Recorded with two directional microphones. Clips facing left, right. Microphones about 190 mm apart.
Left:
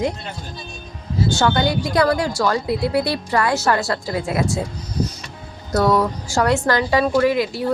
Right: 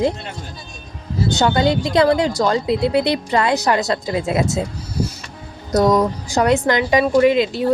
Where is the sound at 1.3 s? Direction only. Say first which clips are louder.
Right 3 dB; 20° right (ahead or behind).